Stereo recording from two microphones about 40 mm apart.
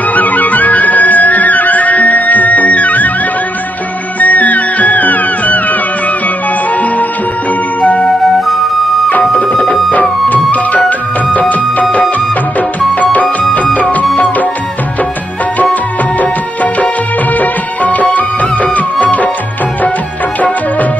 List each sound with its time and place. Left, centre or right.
0.1 s music: left
4.2 s music: left
7.8 s flute: left
9.4 s music: centre
10.3 s music: left
13.0 s music: left
17.4 s music of bollywood: left